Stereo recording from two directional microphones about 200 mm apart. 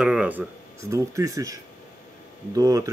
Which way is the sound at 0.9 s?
15° right (ahead or behind).